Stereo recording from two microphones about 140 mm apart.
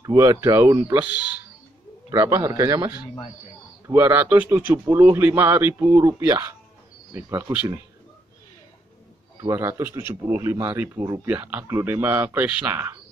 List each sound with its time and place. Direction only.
0.0 s speech: 25° right (ahead or behind)
9.4 s speech: 20° right (ahead or behind)
11.2 s speech: 10° right (ahead or behind)